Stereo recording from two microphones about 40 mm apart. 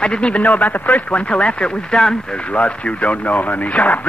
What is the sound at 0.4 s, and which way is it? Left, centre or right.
Speech, left.